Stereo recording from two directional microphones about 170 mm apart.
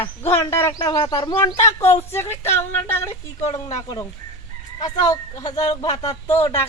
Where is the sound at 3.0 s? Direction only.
40° left (ahead or behind).